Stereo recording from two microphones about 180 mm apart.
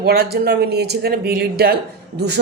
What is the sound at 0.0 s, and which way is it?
A woman's voice, 60° right (ahead or behind).